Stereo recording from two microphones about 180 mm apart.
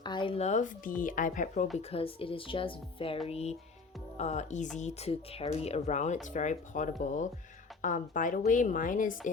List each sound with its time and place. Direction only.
0.0 s speech: 25° left (ahead or behind); by 1.6 s 45° left (ahead or behind)
1.9 s a woman's voice: 30° left (ahead or behind); by 9.3 s 50° left (ahead or behind)